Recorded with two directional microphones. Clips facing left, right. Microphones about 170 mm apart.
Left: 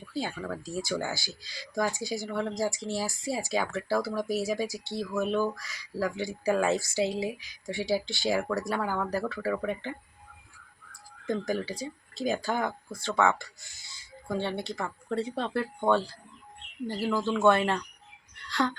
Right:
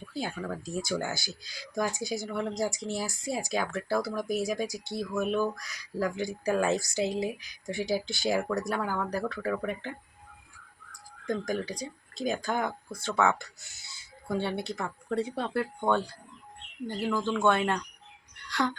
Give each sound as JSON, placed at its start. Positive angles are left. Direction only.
{"t": 0.0, "sound": "speech", "side_deg": 0}
{"t": 11.3, "sound": "speech", "side_deg": 5}
{"t": 16.8, "sound": "speech", "side_deg": 5}